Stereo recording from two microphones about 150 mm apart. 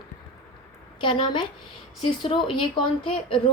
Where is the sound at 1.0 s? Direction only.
35° left (ahead or behind).